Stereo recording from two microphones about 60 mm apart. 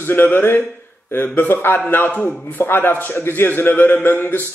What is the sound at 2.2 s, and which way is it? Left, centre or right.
A man's voice, left.